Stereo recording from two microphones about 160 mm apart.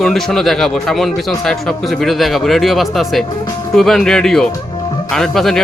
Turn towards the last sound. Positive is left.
turn(degrees=0)  # may be behind; listen again after turning